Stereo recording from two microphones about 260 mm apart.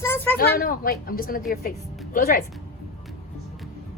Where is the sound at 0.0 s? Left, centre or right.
Centre.